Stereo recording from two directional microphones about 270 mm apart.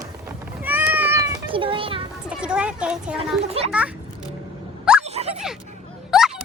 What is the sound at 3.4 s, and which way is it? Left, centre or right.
Speech, right.